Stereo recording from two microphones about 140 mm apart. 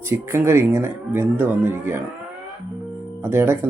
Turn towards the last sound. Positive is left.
turn(degrees=-15)  # may be behind; listen again after turning